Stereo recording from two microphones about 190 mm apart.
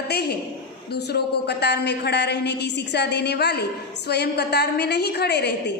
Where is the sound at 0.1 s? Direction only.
60° left (ahead or behind).